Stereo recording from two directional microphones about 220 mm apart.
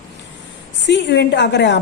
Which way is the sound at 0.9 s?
50° left (ahead or behind).